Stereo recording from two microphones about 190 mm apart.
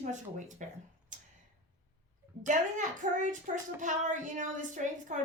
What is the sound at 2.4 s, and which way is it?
A woman's voice, 40° right (ahead or behind).